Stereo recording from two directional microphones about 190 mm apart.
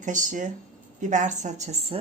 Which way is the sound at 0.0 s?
40° right (ahead or behind).